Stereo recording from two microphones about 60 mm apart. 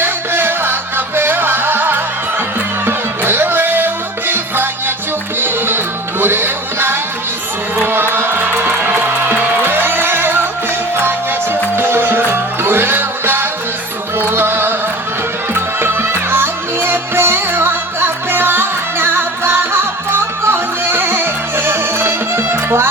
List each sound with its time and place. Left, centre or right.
0.0 s music: right
11.8 s music: right